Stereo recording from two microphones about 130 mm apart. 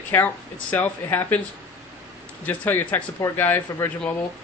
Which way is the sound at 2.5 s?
15° left (ahead or behind).